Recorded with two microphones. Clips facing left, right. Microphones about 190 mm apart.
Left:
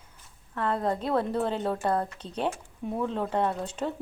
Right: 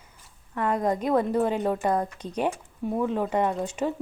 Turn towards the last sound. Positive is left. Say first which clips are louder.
# right 3 dB
turn(degrees=-10)  # may be behind; listen again after turning